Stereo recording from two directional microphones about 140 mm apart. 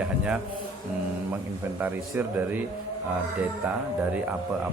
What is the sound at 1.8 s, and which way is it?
Speech, 15° right (ahead or behind).